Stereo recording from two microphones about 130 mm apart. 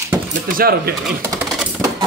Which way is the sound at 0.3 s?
90° right.